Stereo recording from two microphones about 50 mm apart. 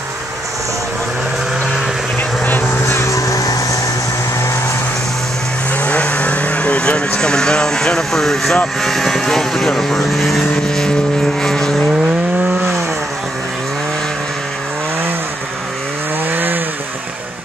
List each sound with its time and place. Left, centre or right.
2.1 s vehicle: left
2.9 s vehicle: left
5.7 s vehicle: left; by 8.5 s centre
8.8 s speech: centre
10.5 s vehicle: centre
16.3 s chainsaw: right